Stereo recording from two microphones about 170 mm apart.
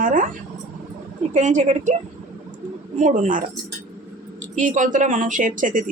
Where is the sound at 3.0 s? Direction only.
45° right (ahead or behind).